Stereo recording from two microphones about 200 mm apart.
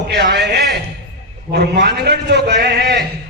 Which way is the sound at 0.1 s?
55° right (ahead or behind).